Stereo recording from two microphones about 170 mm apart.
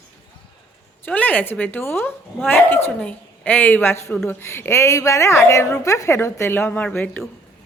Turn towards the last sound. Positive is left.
turn(degrees=10)  # may be behind; listen again after turning